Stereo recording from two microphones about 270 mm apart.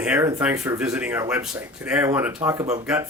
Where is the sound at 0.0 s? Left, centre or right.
Centre.